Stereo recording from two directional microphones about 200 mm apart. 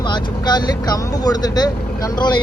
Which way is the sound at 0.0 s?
20° left (ahead or behind).